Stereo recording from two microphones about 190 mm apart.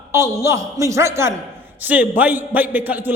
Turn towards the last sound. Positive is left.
turn(degrees=-10)  # may be behind; listen again after turning